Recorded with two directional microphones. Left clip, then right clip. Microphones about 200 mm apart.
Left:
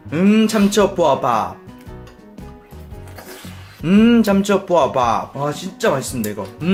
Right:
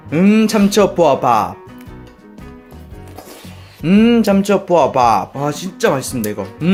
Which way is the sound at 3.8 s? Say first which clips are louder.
Right 2 dB; 15° right (ahead or behind).